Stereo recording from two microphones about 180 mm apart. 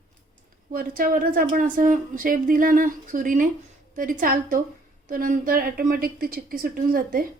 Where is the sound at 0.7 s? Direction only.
50° right (ahead or behind).